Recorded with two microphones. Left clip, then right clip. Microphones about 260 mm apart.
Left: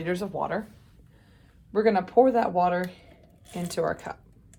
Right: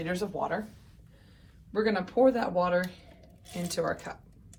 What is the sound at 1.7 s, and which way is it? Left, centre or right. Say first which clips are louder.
Speech: left 6 dB; left.